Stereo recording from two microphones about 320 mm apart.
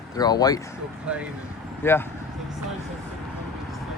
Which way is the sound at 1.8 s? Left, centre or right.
Centre.